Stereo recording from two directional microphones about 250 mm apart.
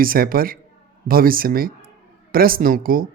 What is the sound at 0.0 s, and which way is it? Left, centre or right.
Speech, right.